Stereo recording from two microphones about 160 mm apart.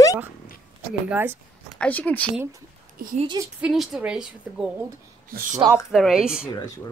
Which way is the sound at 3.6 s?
Centre (ahead or behind).